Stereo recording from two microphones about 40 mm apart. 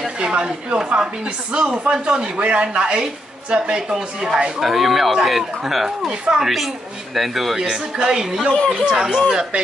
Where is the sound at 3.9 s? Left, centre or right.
Centre.